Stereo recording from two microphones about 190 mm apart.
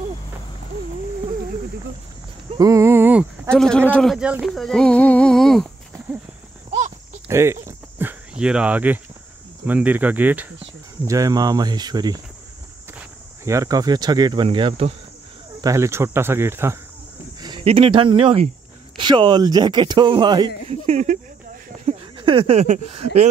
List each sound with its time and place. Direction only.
2.5 s a sound: 15° right (ahead or behind)
3.5 s speech: 5° left (ahead or behind)
7.2 s a sound: 15° right (ahead or behind)
9.7 s speech: 10° right (ahead or behind); by 15.0 s 30° right (ahead or behind)
15.6 s speech: 15° right (ahead or behind)
17.4 s speech: 25° right (ahead or behind)
20.8 s speech: 40° right (ahead or behind)
21.8 s speech: 25° right (ahead or behind)